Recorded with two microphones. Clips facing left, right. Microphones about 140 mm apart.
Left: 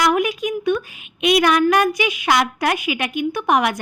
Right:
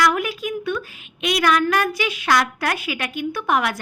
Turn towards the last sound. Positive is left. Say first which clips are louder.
# left 3 dB
turn(degrees=20)  # may be behind; listen again after turning